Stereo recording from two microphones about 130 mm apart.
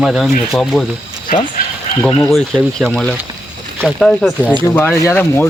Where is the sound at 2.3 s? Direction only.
Centre (ahead or behind).